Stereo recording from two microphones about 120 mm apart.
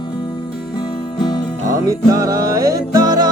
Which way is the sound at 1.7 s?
30° right (ahead or behind).